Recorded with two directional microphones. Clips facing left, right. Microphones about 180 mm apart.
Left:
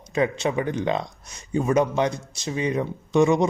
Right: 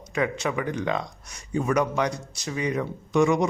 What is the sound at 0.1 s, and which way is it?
A man's voice, 25° left (ahead or behind).